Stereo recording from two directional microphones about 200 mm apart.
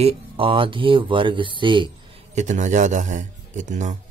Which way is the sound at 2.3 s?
35° right (ahead or behind).